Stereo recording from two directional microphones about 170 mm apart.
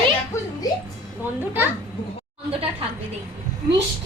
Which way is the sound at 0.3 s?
15° left (ahead or behind).